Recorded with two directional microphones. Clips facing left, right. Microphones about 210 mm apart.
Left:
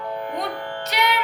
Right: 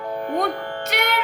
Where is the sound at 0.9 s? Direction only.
50° right (ahead or behind).